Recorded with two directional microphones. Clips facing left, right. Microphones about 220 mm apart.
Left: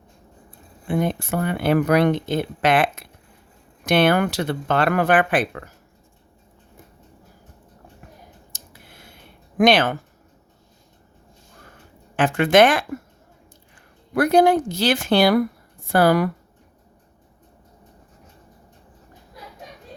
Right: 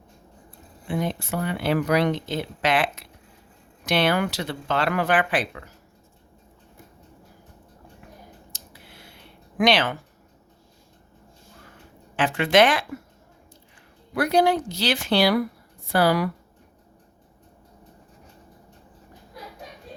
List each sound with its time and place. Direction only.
0.9 s speech: 55° left (ahead or behind)
8.5 s a sound: 50° left (ahead or behind)
9.6 s speech: 50° left (ahead or behind)
12.1 s speech: 50° left (ahead or behind)
14.1 s speech: 50° left (ahead or behind)